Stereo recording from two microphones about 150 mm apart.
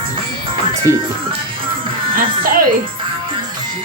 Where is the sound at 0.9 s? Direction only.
20° left (ahead or behind).